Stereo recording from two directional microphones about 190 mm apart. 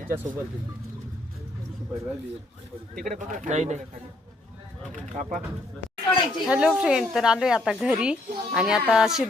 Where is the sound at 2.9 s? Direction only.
45° right (ahead or behind).